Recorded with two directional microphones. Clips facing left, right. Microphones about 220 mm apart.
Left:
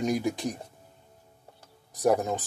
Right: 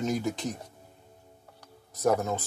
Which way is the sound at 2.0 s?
15° left (ahead or behind).